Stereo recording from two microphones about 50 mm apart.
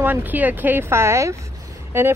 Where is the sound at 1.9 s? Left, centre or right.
Right.